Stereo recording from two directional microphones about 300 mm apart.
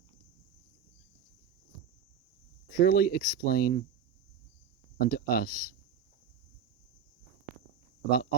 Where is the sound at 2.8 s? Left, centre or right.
Left.